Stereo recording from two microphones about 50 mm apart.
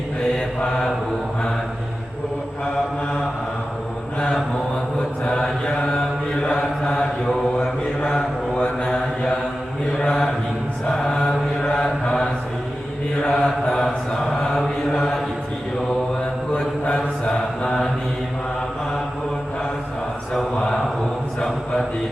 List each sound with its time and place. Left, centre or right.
5.2 s mantra: centre
8.5 s mantra: left
10.0 s mantra: centre
16.8 s mantra: centre
20.3 s a sound: centre